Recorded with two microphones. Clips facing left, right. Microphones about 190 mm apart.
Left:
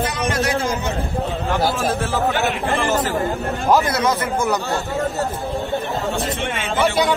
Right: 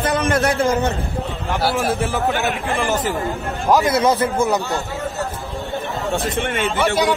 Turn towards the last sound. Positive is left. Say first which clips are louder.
# right 3 dB
turn(degrees=-55)  # may be behind; listen again after turning